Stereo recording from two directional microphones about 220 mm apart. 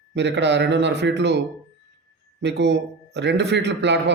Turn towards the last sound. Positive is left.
turn(degrees=-50)  # may be behind; listen again after turning